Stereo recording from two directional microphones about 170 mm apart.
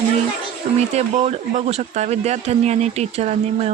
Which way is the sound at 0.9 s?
35° right (ahead or behind).